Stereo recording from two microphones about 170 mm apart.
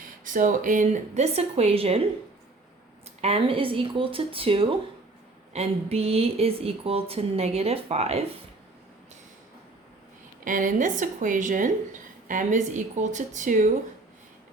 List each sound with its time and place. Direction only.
0.3 s speech: 50° right (ahead or behind); by 2.0 s 35° right (ahead or behind)
3.2 s speech: 35° right (ahead or behind)
10.4 s a woman's voice: 50° right (ahead or behind)